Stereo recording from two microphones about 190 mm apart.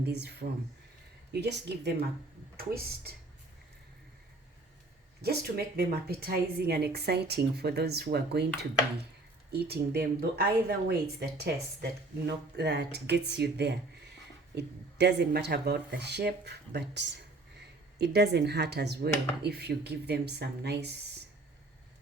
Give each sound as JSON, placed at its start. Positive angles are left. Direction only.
{"t": 0.0, "sound": "a woman's voice", "side_deg": -60}
{"t": 5.2, "sound": "a woman's voice", "side_deg": -55}
{"t": 9.5, "sound": "a woman's voice", "side_deg": -55}